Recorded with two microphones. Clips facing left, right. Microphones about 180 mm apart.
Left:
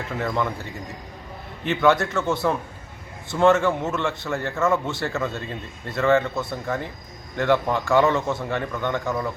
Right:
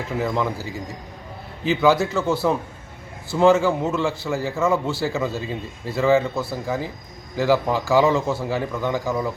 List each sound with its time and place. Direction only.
0.2 s a man's voice: 5° right (ahead or behind)